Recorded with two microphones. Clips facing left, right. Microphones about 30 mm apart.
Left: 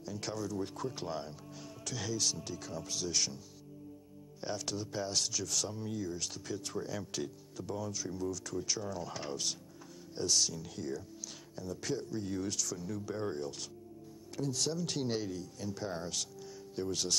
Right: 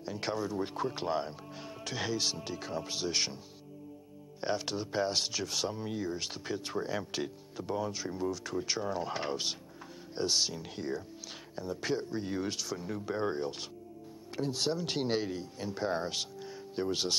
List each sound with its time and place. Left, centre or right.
0.0 s speech: right
4.4 s speech: right